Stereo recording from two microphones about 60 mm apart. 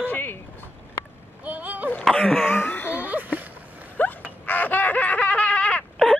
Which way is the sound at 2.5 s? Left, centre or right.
Left.